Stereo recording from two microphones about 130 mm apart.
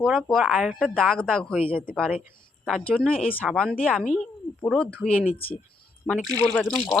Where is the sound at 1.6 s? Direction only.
45° left (ahead or behind).